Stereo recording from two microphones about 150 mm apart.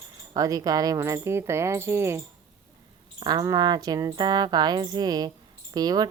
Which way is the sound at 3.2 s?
25° right (ahead or behind).